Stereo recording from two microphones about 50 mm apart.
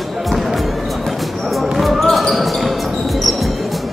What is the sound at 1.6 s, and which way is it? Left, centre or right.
Basketball bounce, centre.